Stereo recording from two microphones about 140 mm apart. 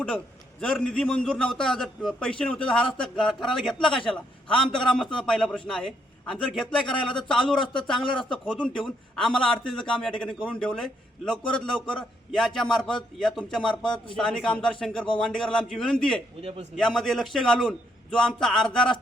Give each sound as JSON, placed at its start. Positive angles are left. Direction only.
{"t": 0.6, "sound": "a man's voice", "side_deg": 5}
{"t": 6.8, "sound": "speech", "side_deg": 35}
{"t": 7.3, "sound": "a man's voice", "side_deg": 0}
{"t": 16.4, "sound": "a man's voice", "side_deg": -45}
{"t": 16.7, "sound": "a man's voice", "side_deg": 5}